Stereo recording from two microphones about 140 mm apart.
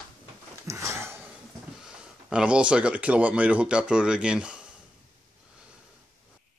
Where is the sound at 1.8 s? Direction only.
5° right (ahead or behind).